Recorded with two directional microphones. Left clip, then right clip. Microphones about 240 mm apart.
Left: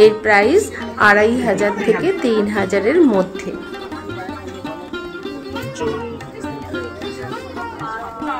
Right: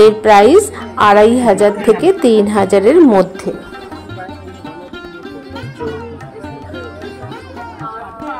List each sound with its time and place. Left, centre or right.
0.0 s a woman's voice: right